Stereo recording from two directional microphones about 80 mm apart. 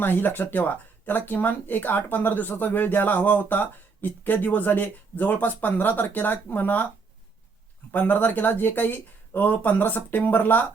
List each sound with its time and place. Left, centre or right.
0.0 s speech: left
7.9 s speech: left